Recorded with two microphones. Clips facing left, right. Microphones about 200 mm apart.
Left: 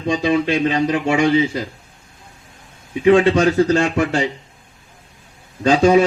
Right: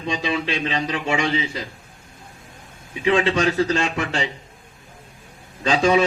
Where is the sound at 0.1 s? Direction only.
45° left (ahead or behind).